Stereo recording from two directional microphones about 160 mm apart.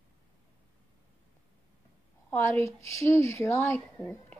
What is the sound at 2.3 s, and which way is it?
Speech, 15° left (ahead or behind).